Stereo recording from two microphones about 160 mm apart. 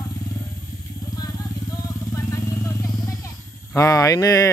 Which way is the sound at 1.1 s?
25° left (ahead or behind).